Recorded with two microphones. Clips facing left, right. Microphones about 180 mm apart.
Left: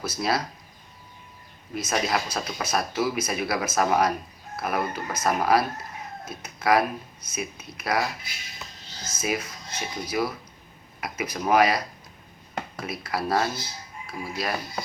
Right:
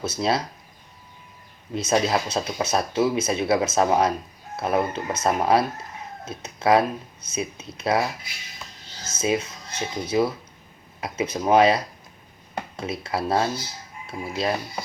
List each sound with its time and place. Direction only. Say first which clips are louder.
0.0 s speech: right 3 dB; 25° right (ahead or behind)
1.7 s speech: right 4 dB; 25° right (ahead or behind)
9.1 s speech: right 5 dB; 25° right (ahead or behind)